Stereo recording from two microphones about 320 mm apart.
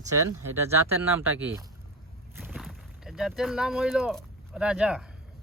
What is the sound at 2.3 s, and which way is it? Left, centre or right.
Boat, centre.